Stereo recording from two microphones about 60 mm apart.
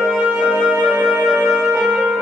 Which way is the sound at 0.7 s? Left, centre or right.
Centre.